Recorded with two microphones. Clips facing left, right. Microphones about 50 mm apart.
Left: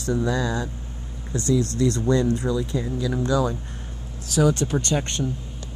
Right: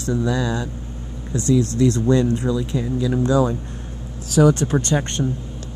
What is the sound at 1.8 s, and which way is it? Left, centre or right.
Speech, right.